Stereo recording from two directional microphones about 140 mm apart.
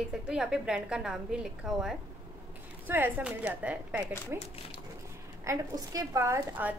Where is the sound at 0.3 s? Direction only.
5° right (ahead or behind).